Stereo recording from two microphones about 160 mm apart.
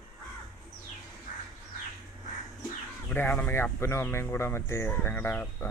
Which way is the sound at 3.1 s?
10° left (ahead or behind).